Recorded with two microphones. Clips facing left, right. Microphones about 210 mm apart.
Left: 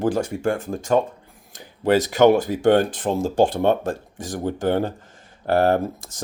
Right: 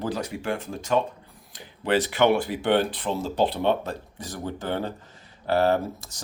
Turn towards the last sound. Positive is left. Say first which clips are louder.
# left 3 dB
turn(degrees=50)  # may be behind; listen again after turning